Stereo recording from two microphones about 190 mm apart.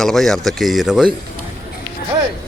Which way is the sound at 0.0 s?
Centre (ahead or behind).